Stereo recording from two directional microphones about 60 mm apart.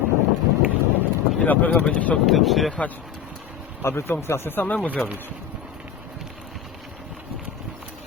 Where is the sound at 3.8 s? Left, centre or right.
Left.